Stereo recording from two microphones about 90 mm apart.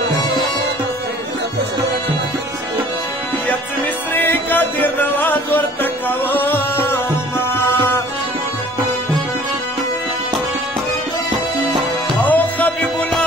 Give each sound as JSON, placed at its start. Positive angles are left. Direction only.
{"t": 4.1, "sound": "music", "side_deg": 20}
{"t": 12.2, "sound": "music", "side_deg": 20}